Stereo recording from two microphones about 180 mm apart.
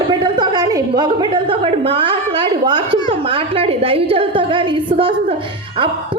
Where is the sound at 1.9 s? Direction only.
30° right (ahead or behind).